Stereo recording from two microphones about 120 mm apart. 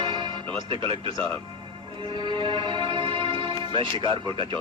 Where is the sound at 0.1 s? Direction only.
40° right (ahead or behind).